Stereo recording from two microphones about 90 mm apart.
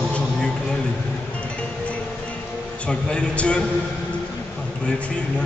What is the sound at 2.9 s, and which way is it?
Speech, 15° left (ahead or behind).